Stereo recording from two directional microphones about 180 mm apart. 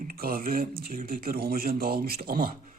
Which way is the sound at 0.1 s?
55° right (ahead or behind).